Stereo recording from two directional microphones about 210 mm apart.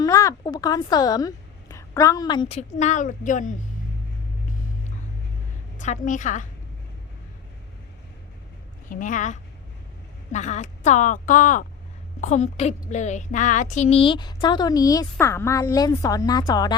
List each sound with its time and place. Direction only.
0.0 s a woman's voice: 15° left (ahead or behind); by 3.5 s 35° left (ahead or behind)
5.8 s a woman's voice: 35° left (ahead or behind)
8.9 s a woman's voice: 40° left (ahead or behind); by 16.7 s 20° left (ahead or behind)